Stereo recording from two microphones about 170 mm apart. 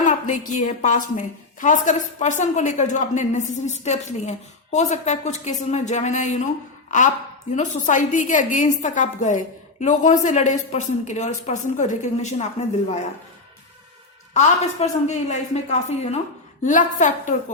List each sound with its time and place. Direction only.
0.0 s a woman's voice: 50° left (ahead or behind)
7.5 s a woman's voice: 45° left (ahead or behind)
14.3 s a woman's voice: 40° left (ahead or behind)